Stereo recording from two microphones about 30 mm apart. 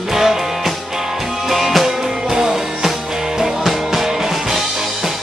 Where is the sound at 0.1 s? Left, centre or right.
Centre.